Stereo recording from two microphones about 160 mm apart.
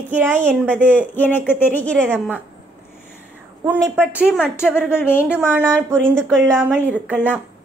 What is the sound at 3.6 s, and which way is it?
A woman's voice, 15° right (ahead or behind).